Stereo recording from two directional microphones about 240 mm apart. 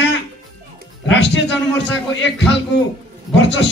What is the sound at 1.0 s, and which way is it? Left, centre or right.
Speech, left.